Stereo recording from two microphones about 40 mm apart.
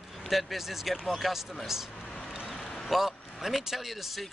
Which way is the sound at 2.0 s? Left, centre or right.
Centre.